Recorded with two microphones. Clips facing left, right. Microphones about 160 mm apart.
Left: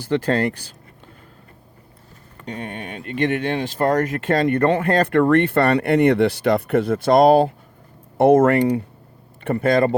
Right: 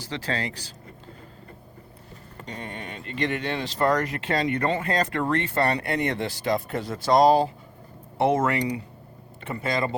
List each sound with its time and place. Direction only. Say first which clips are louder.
0.0 s speech: left 11 dB; 55° left (ahead or behind)
2.5 s speech: left 6 dB; 60° left (ahead or behind)